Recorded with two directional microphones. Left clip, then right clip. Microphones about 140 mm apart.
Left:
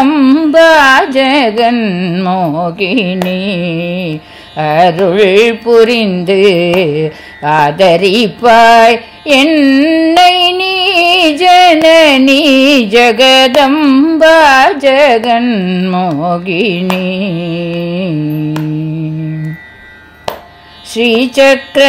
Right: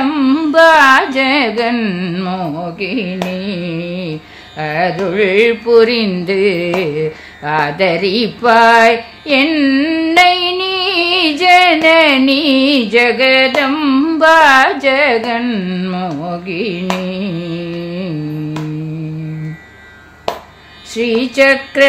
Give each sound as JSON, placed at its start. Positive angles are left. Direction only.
{"t": 0.1, "sound": "carnatic music", "side_deg": 35}
{"t": 2.8, "sound": "carnatic music", "side_deg": 60}
{"t": 3.3, "sound": "music", "side_deg": 50}
{"t": 4.6, "sound": "music", "side_deg": 50}
{"t": 13.7, "sound": "music", "side_deg": 35}
{"t": 16.1, "sound": "music", "side_deg": 60}
{"t": 20.9, "sound": "music", "side_deg": 45}